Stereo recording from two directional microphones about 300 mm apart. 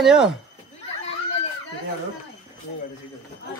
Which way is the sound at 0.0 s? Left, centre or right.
Centre.